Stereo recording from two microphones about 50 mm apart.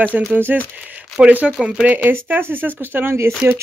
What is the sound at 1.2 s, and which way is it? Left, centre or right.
Speech, right.